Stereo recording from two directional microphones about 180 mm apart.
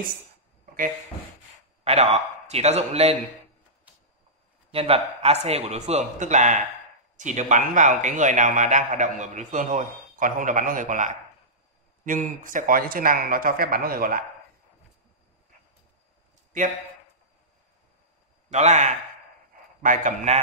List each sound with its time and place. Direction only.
2.4 s speech: 35° right (ahead or behind)
4.6 s speech: 30° right (ahead or behind); by 14.2 s 55° right (ahead or behind)
18.5 s speech: 40° right (ahead or behind)